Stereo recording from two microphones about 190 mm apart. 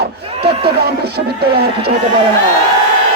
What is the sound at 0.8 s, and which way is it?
Speech, 55° right (ahead or behind).